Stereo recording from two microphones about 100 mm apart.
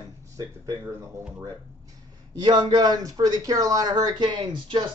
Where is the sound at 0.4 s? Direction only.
30° right (ahead or behind).